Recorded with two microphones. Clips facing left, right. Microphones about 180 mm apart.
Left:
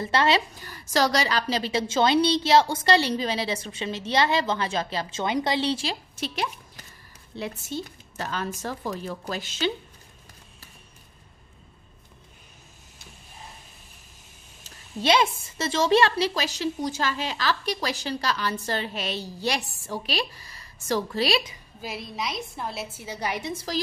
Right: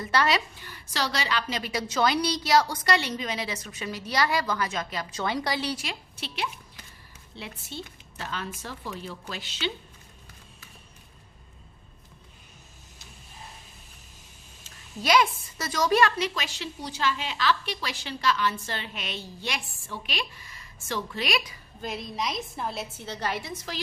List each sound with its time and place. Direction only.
0.0 s a woman's voice: 25° left (ahead or behind)
0.6 s a woman's voice: 40° left (ahead or behind)
6.1 s speech: 45° left (ahead or behind)
14.6 s a woman's voice: 25° left (ahead or behind)
21.8 s a woman's voice: centre (ahead or behind)
23.5 s a woman's voice: 35° left (ahead or behind)